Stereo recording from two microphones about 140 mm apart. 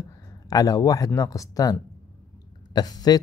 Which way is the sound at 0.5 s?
25° left (ahead or behind).